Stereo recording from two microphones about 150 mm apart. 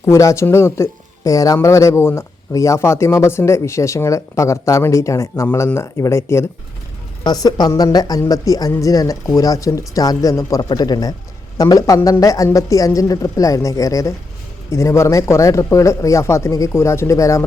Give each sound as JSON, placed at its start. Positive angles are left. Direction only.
{"t": 0.0, "sound": "speech", "side_deg": 20}